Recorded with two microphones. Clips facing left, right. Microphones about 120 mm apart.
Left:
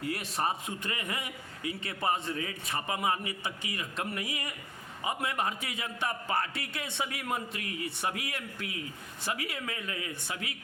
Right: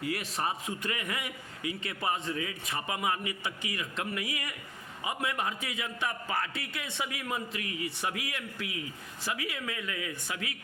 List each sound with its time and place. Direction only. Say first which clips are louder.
0.0 s a man's voice: left 1 dB; 30° left (ahead or behind)